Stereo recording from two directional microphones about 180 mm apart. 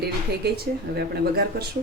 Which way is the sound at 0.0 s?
60° right (ahead or behind).